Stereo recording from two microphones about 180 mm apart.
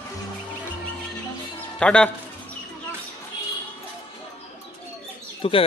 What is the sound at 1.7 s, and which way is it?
Speech, 5° left (ahead or behind).